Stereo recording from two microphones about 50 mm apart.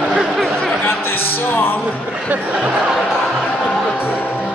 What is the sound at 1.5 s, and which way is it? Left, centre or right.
Music, left.